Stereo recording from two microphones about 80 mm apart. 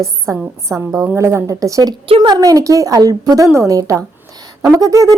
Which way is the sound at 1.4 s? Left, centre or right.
Right.